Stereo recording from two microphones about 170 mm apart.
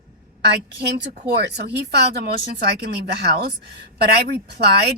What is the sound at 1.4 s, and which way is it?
A woman's voice, 80° right.